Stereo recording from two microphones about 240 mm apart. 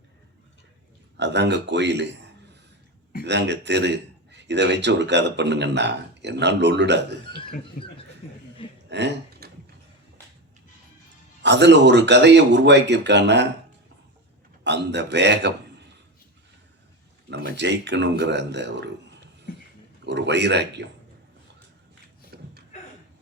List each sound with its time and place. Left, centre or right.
1.1 s a man's voice: right
7.8 s speech: left
8.2 s chuckle: left
8.9 s a sound: right
11.4 s a man's voice: right
14.6 s a man's voice: right
17.3 s a man's voice: right
19.5 s pig: left
20.1 s a man's voice: right
22.3 s a sound: right